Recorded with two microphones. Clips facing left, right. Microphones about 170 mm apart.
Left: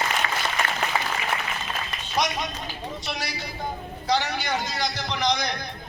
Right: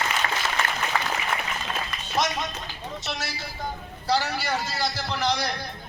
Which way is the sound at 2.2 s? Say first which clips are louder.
Even; centre (ahead or behind).